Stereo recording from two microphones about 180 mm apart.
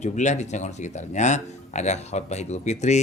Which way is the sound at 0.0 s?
40° left (ahead or behind).